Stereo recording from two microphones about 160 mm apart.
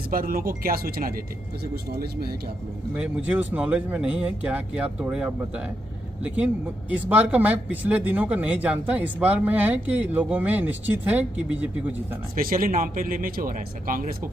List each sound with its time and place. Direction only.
0.1 s speech: 65° right (ahead or behind)
2.9 s speech: 10° right (ahead or behind)
12.4 s speech: 65° right (ahead or behind)